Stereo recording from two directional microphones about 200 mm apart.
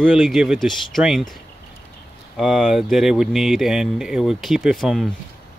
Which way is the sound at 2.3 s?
Centre (ahead or behind).